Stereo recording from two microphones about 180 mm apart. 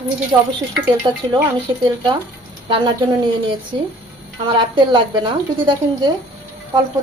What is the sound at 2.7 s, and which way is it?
A woman's voice, 25° right (ahead or behind).